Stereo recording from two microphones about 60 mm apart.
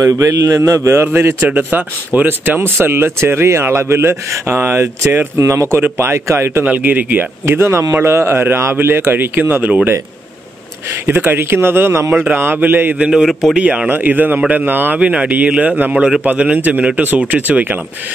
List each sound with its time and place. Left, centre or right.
0.0 s a man's voice: right
1.6 s speech: right
6.6 s speech: right
7.4 s speech: right
11.1 s speech: right
12.4 s speech: right
13.1 s a man's voice: centre
13.6 s speech: centre
13.8 s speech: right